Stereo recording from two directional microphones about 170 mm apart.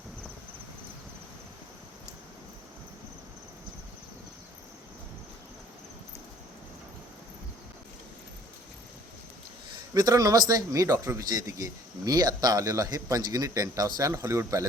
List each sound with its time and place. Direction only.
9.7 s speech: 20° right (ahead or behind)